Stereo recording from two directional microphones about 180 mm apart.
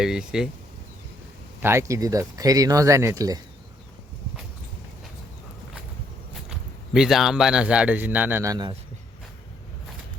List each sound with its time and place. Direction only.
0.0 s speech: 5° right (ahead or behind)
1.6 s speech: 15° right (ahead or behind)
6.5 s speech: 5° right (ahead or behind); by 8.7 s 20° right (ahead or behind)